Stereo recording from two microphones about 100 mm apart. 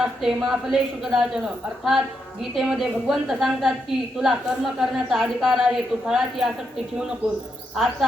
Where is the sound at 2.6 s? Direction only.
Centre (ahead or behind).